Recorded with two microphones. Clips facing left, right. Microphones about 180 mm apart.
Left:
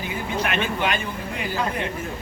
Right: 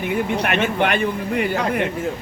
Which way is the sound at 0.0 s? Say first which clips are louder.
Right 5 dB; 65° right (ahead or behind).